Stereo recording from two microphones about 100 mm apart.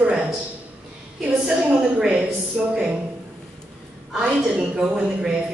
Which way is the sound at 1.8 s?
5° right (ahead or behind).